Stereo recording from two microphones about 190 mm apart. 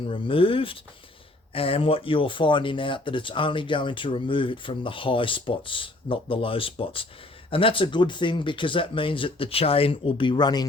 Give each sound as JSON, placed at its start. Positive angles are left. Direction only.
{"t": 0.1, "sound": "speech", "side_deg": 30}